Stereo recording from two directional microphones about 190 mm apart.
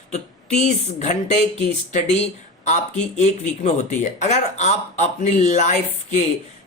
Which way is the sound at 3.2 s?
40° left (ahead or behind).